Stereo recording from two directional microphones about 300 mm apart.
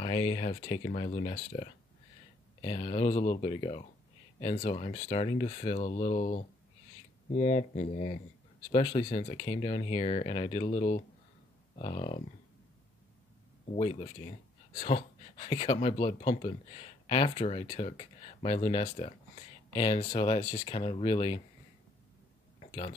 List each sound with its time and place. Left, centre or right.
0.0 s speech: centre
13.7 s speech: centre
22.6 s a sound: centre